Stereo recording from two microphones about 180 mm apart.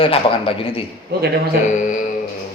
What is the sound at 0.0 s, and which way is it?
Speech, 30° left (ahead or behind).